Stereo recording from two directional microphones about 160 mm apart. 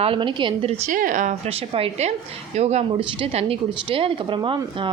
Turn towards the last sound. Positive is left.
turn(degrees=-30)  # may be behind; listen again after turning